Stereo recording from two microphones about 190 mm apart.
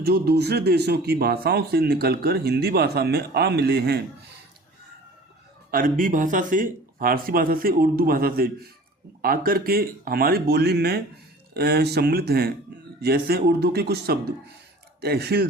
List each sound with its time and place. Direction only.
0.0 s speech: 55° right (ahead or behind)
5.7 s speech: 45° right (ahead or behind)